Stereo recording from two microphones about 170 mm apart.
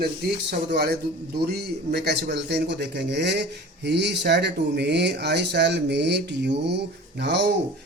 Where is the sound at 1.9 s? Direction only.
80° right.